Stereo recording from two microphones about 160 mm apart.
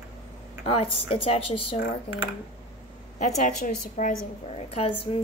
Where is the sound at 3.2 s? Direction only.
50° left (ahead or behind).